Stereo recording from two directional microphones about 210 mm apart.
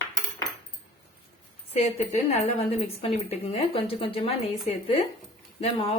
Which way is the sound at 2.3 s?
30° left (ahead or behind).